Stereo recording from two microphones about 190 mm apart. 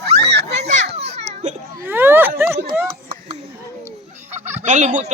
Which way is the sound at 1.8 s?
10° right (ahead or behind).